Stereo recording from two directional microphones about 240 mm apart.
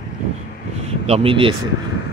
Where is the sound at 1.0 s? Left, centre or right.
Right.